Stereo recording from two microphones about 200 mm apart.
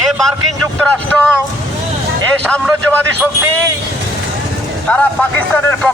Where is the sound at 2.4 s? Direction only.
5° left (ahead or behind).